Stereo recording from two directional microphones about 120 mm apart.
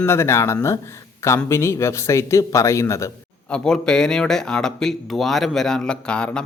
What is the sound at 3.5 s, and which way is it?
Speech, 5° left (ahead or behind).